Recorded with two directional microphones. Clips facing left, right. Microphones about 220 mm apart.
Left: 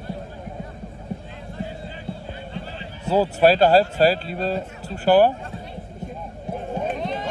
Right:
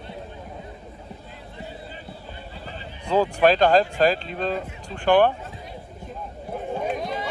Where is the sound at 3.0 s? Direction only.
40° left (ahead or behind).